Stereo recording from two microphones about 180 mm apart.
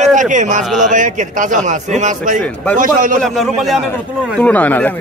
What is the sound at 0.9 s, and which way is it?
A man's voice, 45° right (ahead or behind).